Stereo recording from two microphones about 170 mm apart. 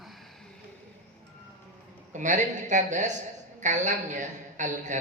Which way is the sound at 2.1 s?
45° right (ahead or behind).